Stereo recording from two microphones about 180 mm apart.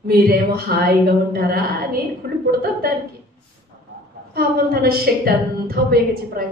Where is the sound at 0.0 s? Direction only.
55° right (ahead or behind).